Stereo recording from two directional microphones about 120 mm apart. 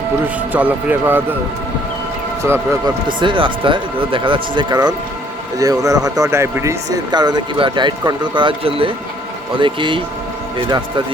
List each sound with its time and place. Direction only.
0.5 s speech: 15° right (ahead or behind)
2.4 s speech: 20° right (ahead or behind)
2.8 s speech: 40° right (ahead or behind); by 7.0 s 25° right (ahead or behind)
7.1 s speech: 35° right (ahead or behind)